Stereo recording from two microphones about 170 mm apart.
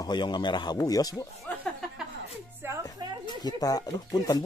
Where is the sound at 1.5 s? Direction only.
10° left (ahead or behind).